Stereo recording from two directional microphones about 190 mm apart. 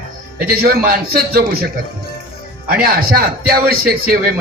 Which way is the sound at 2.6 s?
50° right (ahead or behind).